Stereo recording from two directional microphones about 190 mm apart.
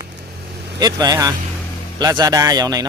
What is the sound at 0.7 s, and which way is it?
Speech, 20° right (ahead or behind).